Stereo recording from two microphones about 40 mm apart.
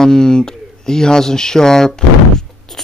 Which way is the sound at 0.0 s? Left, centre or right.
Centre.